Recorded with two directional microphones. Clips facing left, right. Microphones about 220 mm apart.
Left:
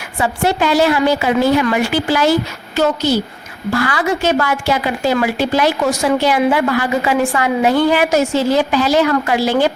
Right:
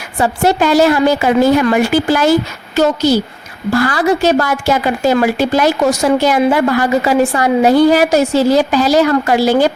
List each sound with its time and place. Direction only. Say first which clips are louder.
0.2 s a woman's voice: right 3 dB; 40° right (ahead or behind)